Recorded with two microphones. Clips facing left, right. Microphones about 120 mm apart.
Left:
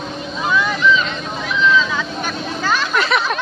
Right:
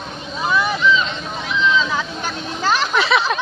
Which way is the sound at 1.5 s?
20° right (ahead or behind).